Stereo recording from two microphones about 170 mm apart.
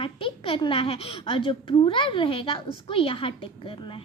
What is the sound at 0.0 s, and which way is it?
A child's voice, 30° left (ahead or behind).